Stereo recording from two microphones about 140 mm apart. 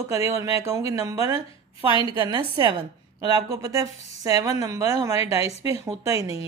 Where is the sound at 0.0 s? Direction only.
20° right (ahead or behind).